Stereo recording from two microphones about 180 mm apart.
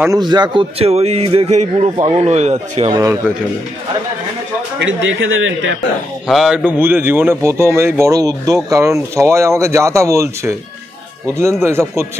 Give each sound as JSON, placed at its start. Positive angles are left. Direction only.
{"t": 0.0, "sound": "a man's voice", "side_deg": -20}
{"t": 2.9, "sound": "a man's voice", "side_deg": -20}
{"t": 4.7, "sound": "speech", "side_deg": -90}
{"t": 6.2, "sound": "a man's voice", "side_deg": 0}